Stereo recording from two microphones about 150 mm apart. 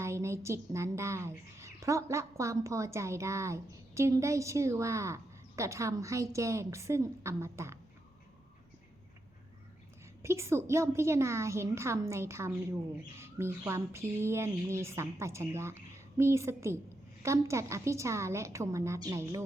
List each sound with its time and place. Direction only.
0.0 s a woman's voice: 20° right (ahead or behind)
10.2 s a woman's voice: 15° right (ahead or behind)